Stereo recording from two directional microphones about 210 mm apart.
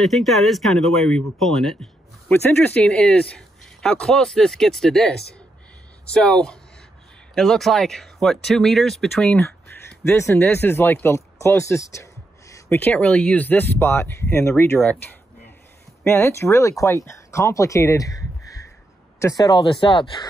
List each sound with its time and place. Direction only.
0.0 s speech: centre (ahead or behind)
6.1 s speech: 5° left (ahead or behind); by 20.2 s 25° left (ahead or behind)